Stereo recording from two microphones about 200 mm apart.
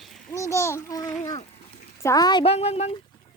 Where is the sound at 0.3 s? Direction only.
15° left (ahead or behind).